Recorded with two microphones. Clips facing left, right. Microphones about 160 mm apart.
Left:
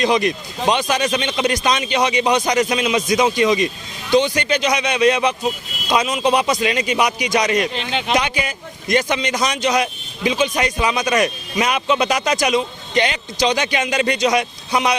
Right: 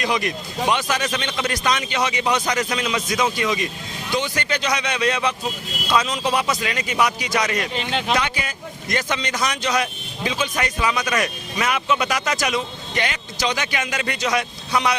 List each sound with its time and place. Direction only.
0.0 s a man's voice: 25° left (ahead or behind)
7.7 s speech: centre (ahead or behind)
8.1 s a man's voice: 15° left (ahead or behind)